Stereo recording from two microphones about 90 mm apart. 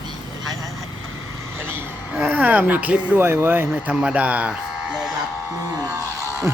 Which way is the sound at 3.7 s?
10° right (ahead or behind).